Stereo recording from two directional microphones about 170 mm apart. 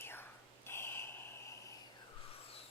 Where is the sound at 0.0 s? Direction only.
15° left (ahead or behind).